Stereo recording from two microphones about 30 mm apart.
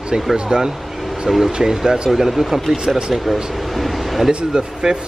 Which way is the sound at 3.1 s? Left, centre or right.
Centre.